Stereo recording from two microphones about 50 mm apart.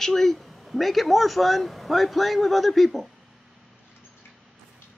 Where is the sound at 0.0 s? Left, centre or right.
Centre.